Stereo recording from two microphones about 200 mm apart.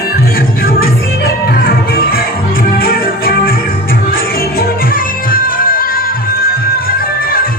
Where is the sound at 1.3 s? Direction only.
50° left (ahead or behind).